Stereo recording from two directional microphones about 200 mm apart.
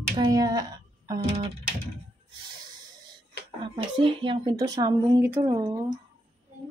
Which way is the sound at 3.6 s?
25° right (ahead or behind).